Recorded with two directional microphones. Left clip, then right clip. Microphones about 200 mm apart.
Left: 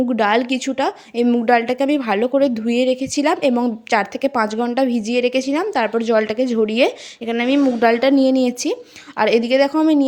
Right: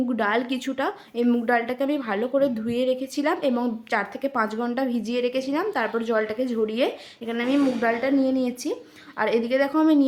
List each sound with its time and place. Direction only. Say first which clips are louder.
0.1 s speech: left 7 dB; 30° left (ahead or behind)